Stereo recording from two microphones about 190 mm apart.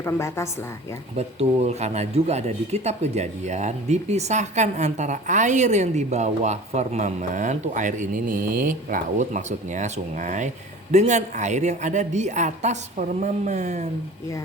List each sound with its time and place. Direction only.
0.0 s a woman's voice: 15° left (ahead or behind)
1.1 s speech: 35° right (ahead or behind)